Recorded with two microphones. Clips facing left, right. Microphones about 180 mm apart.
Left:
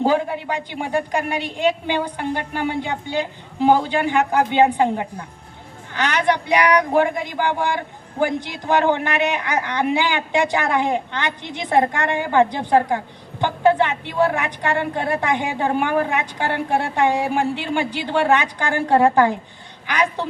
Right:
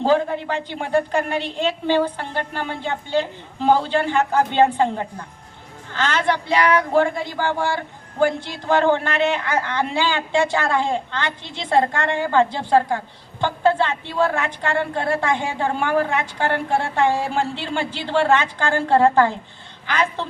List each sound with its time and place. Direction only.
0.0 s a woman's voice: 15° left (ahead or behind)